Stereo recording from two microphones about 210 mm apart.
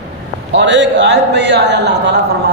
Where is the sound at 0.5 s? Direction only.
60° right (ahead or behind).